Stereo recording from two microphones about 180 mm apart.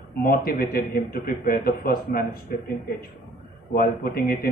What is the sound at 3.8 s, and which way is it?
Speech, 55° left (ahead or behind).